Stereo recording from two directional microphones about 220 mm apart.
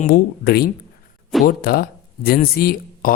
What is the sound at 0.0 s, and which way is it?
Speech, 45° left (ahead or behind).